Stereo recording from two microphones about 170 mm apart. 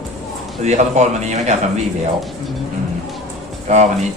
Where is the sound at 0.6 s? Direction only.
45° right (ahead or behind).